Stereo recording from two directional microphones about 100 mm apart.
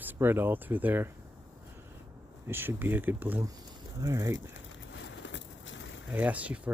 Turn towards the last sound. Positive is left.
turn(degrees=-15)  # may be behind; listen again after turning